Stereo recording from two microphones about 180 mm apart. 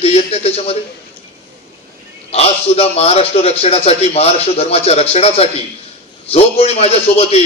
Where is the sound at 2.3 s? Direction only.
35° left (ahead or behind).